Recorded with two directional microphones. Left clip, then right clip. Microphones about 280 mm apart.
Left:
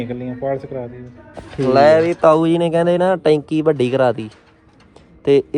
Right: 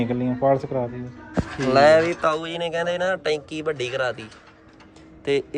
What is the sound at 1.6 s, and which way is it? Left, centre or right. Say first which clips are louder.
Speech: left 4 dB; centre.